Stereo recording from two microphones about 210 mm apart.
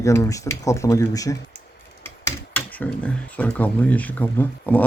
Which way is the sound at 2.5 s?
5° left (ahead or behind).